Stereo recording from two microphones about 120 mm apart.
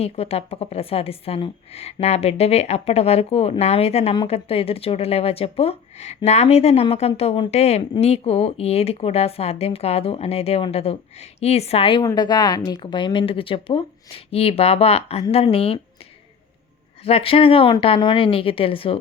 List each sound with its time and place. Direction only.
0.0 s speech: 60° left (ahead or behind)
12.0 s speech: 35° left (ahead or behind); by 15.8 s 55° left (ahead or behind)
17.0 s speech: 55° left (ahead or behind)